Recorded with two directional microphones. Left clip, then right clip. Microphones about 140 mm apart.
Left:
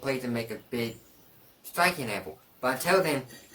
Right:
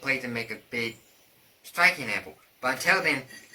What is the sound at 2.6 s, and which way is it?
Speech, 35° left (ahead or behind).